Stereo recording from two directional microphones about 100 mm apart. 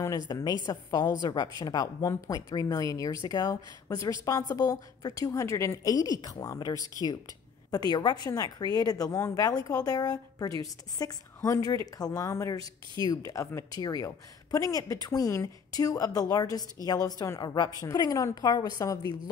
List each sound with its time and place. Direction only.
0.3 s a woman's voice: 45° left (ahead or behind)